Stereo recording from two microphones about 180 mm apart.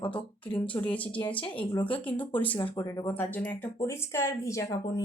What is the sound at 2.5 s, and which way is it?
Speech, 20° left (ahead or behind).